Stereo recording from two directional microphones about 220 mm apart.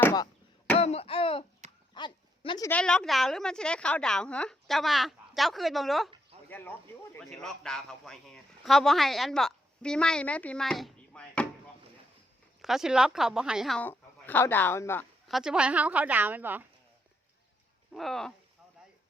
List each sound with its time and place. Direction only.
0.0 s a sound: 15° left (ahead or behind)
0.8 s a sound: 25° left (ahead or behind)
1.9 s dog: 20° left (ahead or behind)
2.6 s a man's voice: 5° left (ahead or behind)
12.6 s a man's voice: centre (ahead or behind)
15.3 s a woman's voice: centre (ahead or behind)
17.9 s a man's voice: centre (ahead or behind)